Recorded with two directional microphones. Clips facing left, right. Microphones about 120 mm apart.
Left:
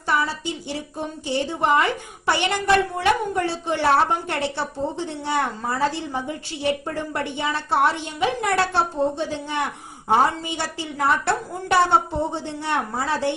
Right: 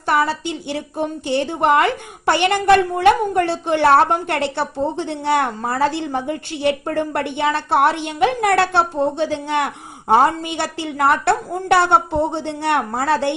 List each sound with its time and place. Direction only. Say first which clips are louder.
0.0 s a woman's voice: right 5 dB; 65° right (ahead or behind)